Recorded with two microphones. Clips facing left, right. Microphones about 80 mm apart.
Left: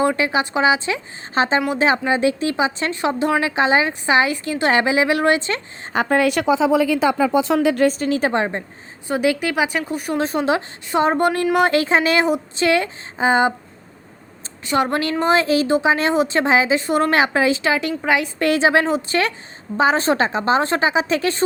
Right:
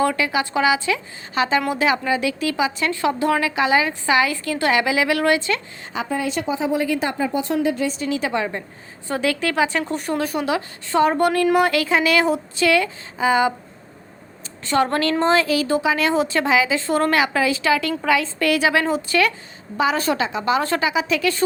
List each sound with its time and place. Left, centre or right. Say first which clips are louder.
0.0 s a woman's voice: left 2 dB; left
5.9 s a woman's voice: left 6 dB; left
7.9 s speech: left 5 dB; left
9.0 s a woman's voice: left 3 dB; centre
10.2 s a woman's voice: left 5 dB; left
14.6 s a woman's voice: even; centre